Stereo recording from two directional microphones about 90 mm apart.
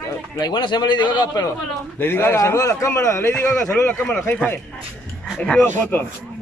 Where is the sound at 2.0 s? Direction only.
25° left (ahead or behind).